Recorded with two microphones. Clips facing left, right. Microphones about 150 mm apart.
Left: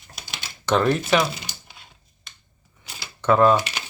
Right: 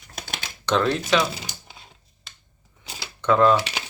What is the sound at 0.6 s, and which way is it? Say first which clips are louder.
Speech: left 2 dB; 10° left (ahead or behind).